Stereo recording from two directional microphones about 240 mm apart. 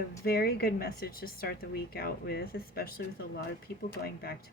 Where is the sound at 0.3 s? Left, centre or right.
Left.